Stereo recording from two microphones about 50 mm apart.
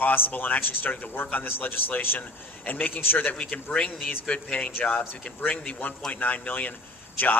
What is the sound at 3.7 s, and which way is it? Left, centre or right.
A man's voice, left.